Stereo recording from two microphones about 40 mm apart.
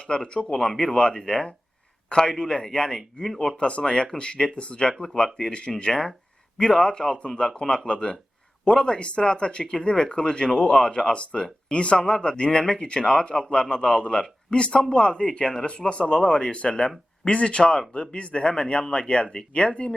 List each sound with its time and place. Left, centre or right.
0.0 s speech: left
3.6 s speech: left